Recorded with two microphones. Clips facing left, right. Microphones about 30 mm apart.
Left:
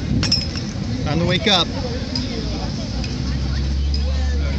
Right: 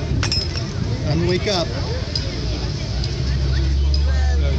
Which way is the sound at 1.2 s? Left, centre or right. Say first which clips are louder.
Left 2 dB; left.